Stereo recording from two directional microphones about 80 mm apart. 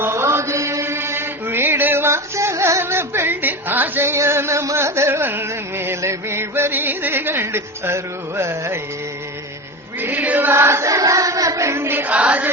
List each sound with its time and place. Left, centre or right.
0.0 s chant: right
10.0 s chant: right